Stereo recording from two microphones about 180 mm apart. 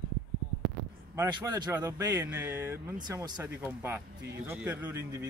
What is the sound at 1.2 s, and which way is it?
Speech, 25° right (ahead or behind).